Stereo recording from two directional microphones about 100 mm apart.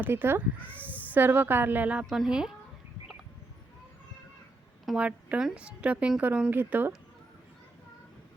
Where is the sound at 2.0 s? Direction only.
5° right (ahead or behind).